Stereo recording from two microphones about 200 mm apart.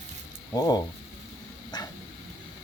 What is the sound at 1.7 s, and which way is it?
Dog, 20° left (ahead or behind).